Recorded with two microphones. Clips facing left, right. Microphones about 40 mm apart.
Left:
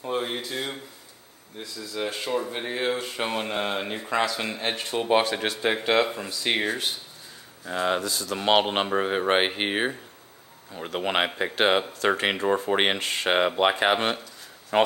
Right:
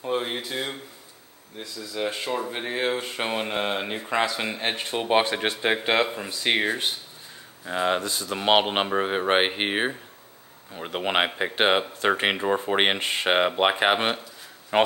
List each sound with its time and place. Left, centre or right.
0.0 s a sound: centre
1.6 s speech: centre; by 8.4 s right
8.4 s speech: centre
14.7 s speech: right